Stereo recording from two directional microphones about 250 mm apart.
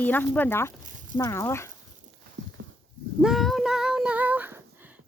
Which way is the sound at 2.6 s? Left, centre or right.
Right.